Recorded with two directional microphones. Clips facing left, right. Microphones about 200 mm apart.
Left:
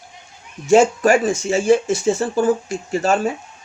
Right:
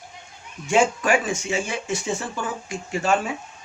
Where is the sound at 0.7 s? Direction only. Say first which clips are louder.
Left 7 dB; 40° left (ahead or behind).